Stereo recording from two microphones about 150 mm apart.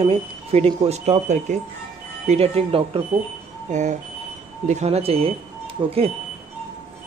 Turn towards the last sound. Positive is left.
turn(degrees=-35)  # may be behind; listen again after turning